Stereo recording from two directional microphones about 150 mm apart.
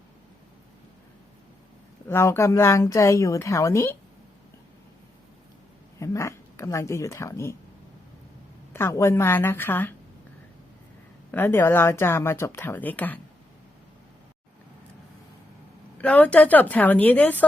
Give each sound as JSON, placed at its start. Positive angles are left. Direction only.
{"t": 2.0, "sound": "speech", "side_deg": 15}
{"t": 6.0, "sound": "speech", "side_deg": 20}
{"t": 8.7, "sound": "speech", "side_deg": 15}
{"t": 11.3, "sound": "speech", "side_deg": 15}
{"t": 16.0, "sound": "speech", "side_deg": 10}